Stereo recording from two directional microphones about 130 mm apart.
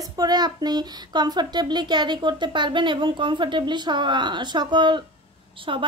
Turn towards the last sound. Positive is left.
turn(degrees=-40)  # may be behind; listen again after turning